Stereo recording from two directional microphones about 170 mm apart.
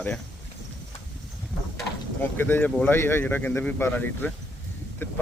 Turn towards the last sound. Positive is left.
turn(degrees=15)  # may be behind; listen again after turning